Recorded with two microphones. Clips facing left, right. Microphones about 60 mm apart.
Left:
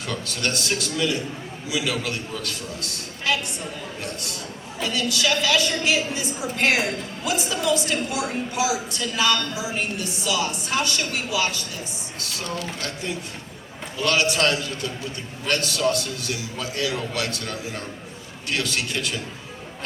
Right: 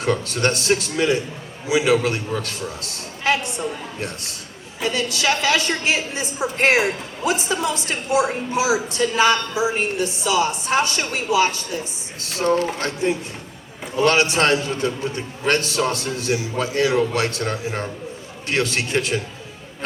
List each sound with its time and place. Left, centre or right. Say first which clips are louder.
0.0 s a woman's voice: right 7 dB; right